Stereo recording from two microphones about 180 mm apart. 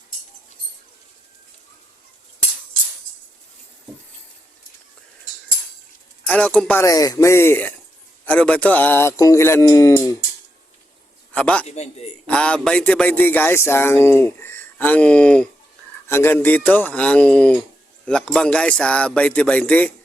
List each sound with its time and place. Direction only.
6.2 s speech: 5° left (ahead or behind)
6.8 s speech: 20° left (ahead or behind)
11.3 s a man's voice: 5° left (ahead or behind)
11.6 s a man's voice: 35° left (ahead or behind)
12.2 s speech: 5° left (ahead or behind)